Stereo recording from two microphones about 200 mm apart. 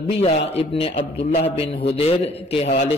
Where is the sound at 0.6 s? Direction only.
30° left (ahead or behind).